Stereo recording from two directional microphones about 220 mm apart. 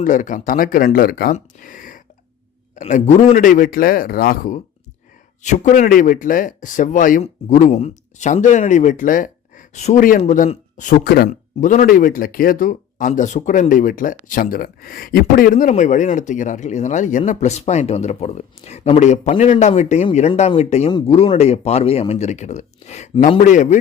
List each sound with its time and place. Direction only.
0.0 s speech: 35° left (ahead or behind)